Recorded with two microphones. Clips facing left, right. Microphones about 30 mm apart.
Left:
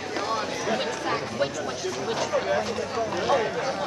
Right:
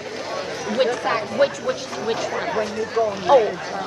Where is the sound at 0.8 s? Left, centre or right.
Right.